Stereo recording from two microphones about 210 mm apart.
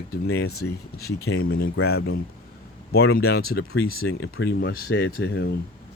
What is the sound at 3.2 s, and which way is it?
Speech, 50° left (ahead or behind).